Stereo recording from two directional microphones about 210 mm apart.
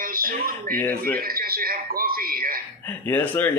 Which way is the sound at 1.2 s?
45° right (ahead or behind).